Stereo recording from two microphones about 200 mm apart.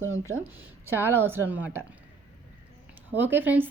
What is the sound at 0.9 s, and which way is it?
Speech, 10° right (ahead or behind).